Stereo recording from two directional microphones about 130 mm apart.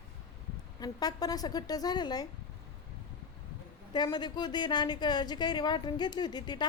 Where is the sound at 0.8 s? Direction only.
30° left (ahead or behind).